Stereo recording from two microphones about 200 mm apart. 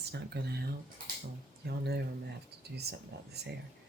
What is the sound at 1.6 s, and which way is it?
Speech, 55° right (ahead or behind).